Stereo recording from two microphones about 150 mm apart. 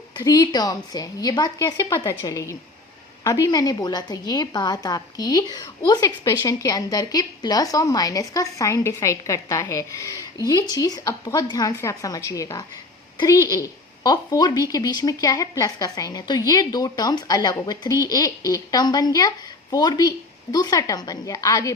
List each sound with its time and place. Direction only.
0.2 s a woman's voice: 25° left (ahead or behind)